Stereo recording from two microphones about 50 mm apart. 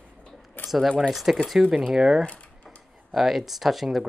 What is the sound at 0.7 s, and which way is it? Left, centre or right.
Speech, centre.